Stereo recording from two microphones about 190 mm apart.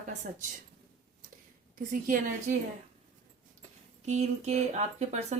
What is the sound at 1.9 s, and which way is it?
Speech, 45° right (ahead or behind).